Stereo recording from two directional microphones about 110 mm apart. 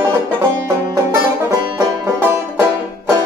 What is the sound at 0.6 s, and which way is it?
Music, 25° right (ahead or behind).